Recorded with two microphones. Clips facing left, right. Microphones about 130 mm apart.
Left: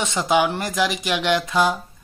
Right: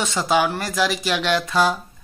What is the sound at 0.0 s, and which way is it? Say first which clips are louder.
Speech: even; 20° left (ahead or behind).